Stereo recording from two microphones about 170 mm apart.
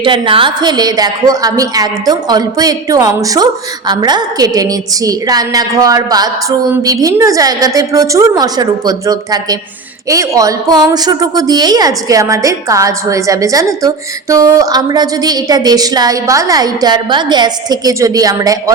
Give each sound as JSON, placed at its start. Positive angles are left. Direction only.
{"t": 0.0, "sound": "a woman's voice", "side_deg": -30}